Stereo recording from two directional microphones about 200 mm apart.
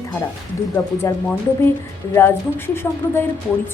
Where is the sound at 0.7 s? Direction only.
10° left (ahead or behind).